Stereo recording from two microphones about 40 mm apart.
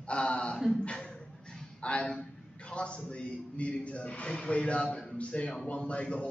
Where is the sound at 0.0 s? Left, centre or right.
Left.